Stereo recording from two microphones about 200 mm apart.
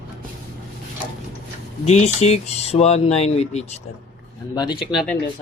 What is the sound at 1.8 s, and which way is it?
Speech, 35° left (ahead or behind).